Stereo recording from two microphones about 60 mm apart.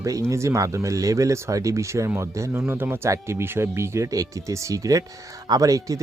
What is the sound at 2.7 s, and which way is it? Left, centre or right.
Speech, right.